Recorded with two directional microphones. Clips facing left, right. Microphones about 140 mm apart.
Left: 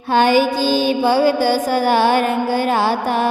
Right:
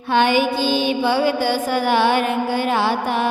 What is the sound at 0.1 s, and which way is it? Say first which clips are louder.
Mantra: left 3 dB; 40° left (ahead or behind).